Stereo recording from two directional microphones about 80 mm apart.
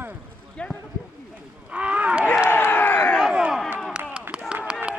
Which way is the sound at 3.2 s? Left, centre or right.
Centre.